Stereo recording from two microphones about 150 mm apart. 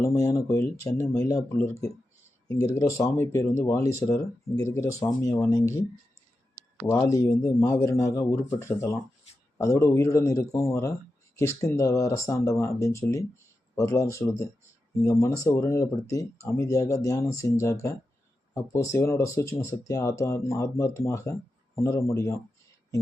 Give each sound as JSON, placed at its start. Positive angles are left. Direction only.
{"t": 0.0, "sound": "speech", "side_deg": 20}
{"t": 2.7, "sound": "speech", "side_deg": 20}
{"t": 6.8, "sound": "speech", "side_deg": 20}